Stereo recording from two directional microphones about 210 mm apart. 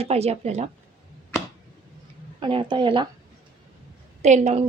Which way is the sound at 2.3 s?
20° right (ahead or behind).